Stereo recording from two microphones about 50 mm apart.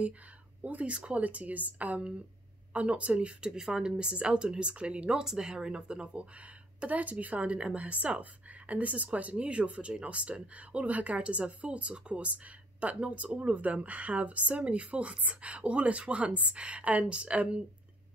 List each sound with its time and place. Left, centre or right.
0.6 s speech: right
5.2 s speech: centre